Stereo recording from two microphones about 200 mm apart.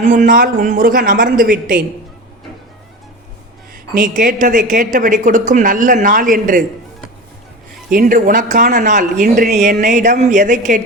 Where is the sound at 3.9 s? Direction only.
45° right (ahead or behind).